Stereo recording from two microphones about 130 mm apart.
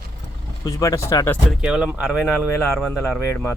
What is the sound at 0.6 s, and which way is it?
Speech, 25° left (ahead or behind).